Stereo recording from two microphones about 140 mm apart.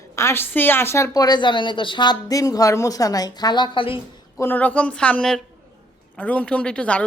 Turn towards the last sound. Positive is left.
turn(degrees=10)  # may be behind; listen again after turning